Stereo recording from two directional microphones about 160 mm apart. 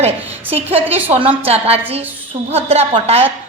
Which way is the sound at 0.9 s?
40° right (ahead or behind).